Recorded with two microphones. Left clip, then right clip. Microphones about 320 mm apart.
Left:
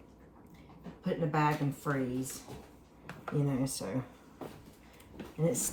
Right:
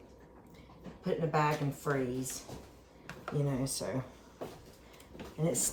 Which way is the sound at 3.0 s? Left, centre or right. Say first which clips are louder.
Left 1 dB; centre.